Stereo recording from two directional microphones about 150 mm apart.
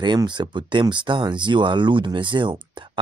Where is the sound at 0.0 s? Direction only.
30° right (ahead or behind).